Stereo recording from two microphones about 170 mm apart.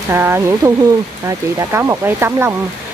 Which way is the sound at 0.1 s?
15° right (ahead or behind).